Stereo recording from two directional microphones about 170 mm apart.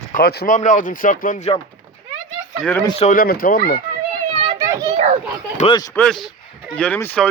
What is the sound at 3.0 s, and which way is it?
Speech, 50° left (ahead or behind).